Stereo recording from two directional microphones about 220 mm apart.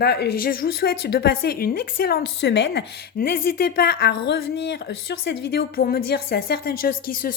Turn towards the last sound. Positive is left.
turn(degrees=40)  # may be behind; listen again after turning